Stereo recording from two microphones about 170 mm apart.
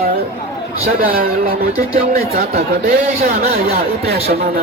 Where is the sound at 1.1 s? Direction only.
60° right (ahead or behind).